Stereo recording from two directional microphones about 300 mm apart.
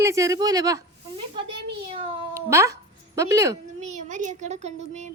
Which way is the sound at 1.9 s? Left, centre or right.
Centre.